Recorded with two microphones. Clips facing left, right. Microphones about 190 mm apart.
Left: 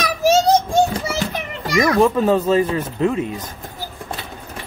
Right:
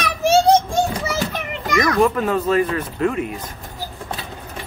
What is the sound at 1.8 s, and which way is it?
Speech, 25° left (ahead or behind).